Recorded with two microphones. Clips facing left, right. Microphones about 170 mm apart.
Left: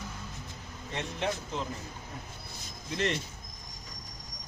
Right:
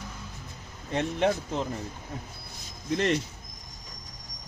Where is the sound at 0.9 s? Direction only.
50° right (ahead or behind).